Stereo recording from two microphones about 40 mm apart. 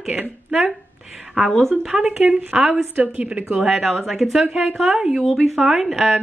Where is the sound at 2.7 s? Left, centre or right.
Right.